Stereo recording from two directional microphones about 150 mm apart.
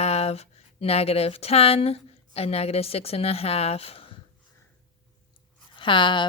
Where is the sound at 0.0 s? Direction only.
45° left (ahead or behind).